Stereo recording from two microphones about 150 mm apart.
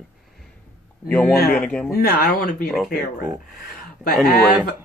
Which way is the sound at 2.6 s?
Centre (ahead or behind).